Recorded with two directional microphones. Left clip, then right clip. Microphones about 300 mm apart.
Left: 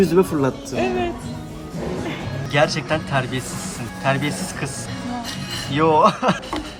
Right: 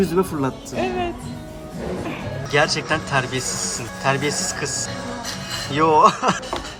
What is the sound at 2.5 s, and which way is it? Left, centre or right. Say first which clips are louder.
Speech: even; centre.